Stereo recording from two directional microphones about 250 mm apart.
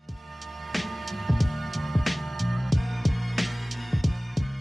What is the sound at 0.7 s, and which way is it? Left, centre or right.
Music, centre.